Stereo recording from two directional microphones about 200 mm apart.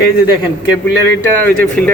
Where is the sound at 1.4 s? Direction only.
5° left (ahead or behind).